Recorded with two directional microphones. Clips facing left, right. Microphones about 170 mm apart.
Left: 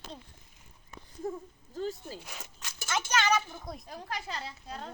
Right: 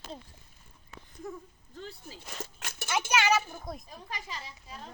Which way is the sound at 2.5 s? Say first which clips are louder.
Right 3 dB; 60° right (ahead or behind).